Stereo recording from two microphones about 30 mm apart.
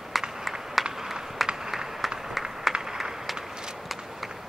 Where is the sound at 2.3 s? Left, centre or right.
Centre.